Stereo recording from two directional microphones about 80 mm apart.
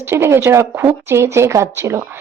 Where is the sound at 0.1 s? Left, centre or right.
Right.